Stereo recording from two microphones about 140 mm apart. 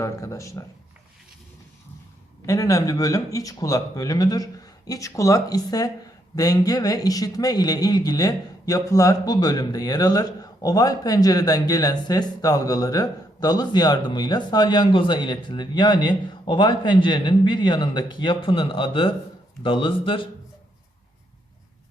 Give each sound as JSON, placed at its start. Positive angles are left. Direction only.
{"t": 0.0, "sound": "a man's voice", "side_deg": 20}
{"t": 2.5, "sound": "a man's voice", "side_deg": 25}